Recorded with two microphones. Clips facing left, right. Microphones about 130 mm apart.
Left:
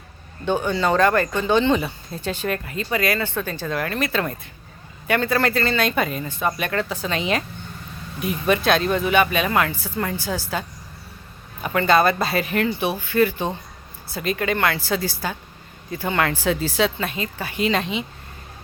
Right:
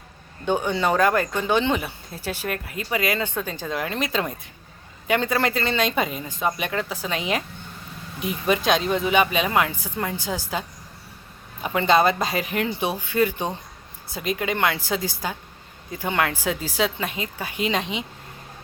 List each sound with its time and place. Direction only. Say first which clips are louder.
0.4 s speech: left 1 dB; 15° right (ahead or behind)
11.6 s speech: left 1 dB; 20° right (ahead or behind)